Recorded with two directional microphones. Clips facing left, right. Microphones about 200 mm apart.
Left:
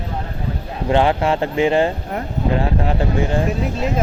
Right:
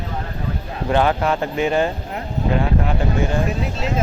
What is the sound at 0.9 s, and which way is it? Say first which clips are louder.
Speech: left 2 dB; 25° left (ahead or behind).